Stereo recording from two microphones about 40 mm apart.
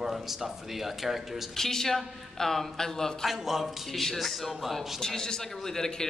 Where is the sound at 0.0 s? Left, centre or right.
Centre.